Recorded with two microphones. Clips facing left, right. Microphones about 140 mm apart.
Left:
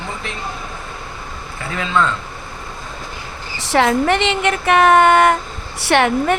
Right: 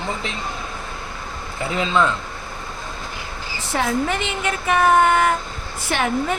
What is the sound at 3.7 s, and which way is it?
A woman's voice, 70° left (ahead or behind).